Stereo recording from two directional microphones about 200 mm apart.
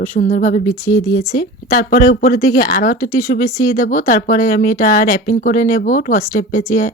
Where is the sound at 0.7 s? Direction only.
15° left (ahead or behind).